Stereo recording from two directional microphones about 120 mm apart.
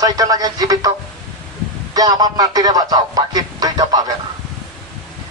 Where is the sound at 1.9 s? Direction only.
30° right (ahead or behind).